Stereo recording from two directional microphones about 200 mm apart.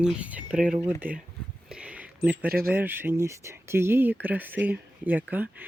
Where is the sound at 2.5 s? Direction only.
50° right (ahead or behind).